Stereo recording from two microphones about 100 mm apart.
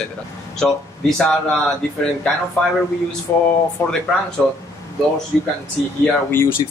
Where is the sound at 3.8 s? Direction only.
30° left (ahead or behind).